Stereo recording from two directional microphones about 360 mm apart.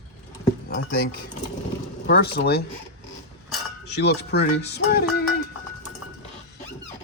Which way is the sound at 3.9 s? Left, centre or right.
Left.